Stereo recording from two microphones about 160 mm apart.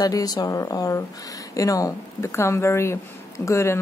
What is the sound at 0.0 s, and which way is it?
A woman's voice, 25° left (ahead or behind).